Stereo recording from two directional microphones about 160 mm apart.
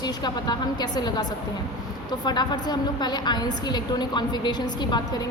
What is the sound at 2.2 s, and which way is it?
A woman's voice, 25° left (ahead or behind).